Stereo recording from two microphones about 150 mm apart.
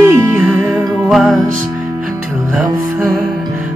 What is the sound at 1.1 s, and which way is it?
Music, centre (ahead or behind).